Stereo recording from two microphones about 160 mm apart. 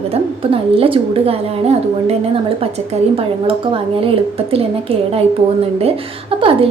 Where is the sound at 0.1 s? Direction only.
35° right (ahead or behind).